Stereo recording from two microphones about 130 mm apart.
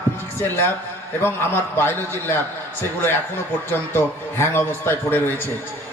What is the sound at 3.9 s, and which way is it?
A man's voice, 15° left (ahead or behind).